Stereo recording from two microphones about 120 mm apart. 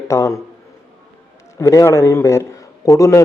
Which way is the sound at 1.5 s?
25° left (ahead or behind).